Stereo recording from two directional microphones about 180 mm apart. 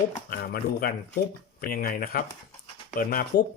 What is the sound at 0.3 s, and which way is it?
Speech, 55° left (ahead or behind).